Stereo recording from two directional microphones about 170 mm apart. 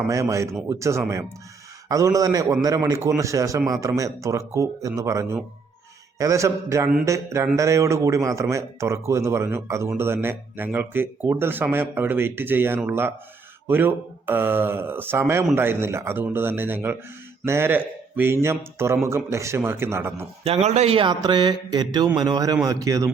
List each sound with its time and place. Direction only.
0.1 s speech: 20° right (ahead or behind)
20.4 s speech: 40° right (ahead or behind); by 23.0 s 20° right (ahead or behind)